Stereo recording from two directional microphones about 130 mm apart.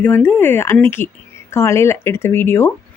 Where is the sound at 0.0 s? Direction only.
15° left (ahead or behind).